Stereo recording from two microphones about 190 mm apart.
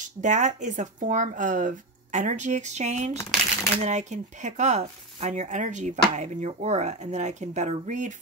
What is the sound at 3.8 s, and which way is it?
Speech, 35° right (ahead or behind).